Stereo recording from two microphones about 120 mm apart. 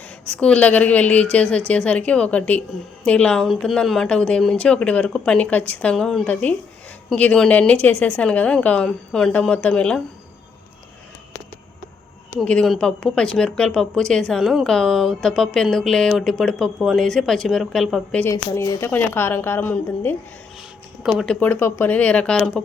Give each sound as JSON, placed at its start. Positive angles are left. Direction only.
{"t": 0.3, "sound": "speech", "side_deg": 10}
{"t": 12.4, "sound": "speech", "side_deg": 5}
{"t": 18.2, "sound": "speech", "side_deg": 25}
{"t": 18.9, "sound": "speech", "side_deg": 15}
{"t": 21.0, "sound": "speech", "side_deg": -5}
{"t": 21.2, "sound": "speech", "side_deg": 15}